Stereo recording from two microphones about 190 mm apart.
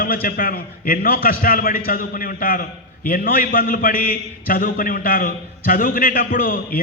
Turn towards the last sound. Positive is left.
turn(degrees=50)  # may be behind; listen again after turning